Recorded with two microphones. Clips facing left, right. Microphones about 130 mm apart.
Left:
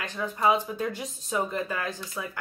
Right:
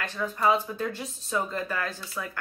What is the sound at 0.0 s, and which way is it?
Speech, 15° left (ahead or behind).